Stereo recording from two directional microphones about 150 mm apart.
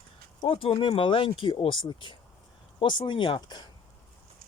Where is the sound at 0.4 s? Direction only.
35° left (ahead or behind).